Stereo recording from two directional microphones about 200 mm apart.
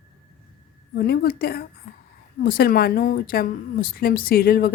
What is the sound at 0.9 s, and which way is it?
A woman's voice, 50° left (ahead or behind).